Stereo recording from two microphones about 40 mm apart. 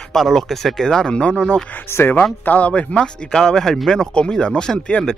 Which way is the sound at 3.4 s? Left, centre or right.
Centre.